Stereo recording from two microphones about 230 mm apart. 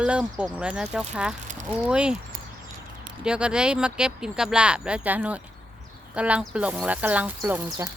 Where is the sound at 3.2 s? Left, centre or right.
Centre.